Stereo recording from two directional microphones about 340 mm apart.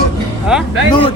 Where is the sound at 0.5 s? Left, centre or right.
Centre.